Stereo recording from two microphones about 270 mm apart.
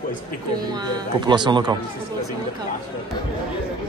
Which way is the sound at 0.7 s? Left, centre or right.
Centre.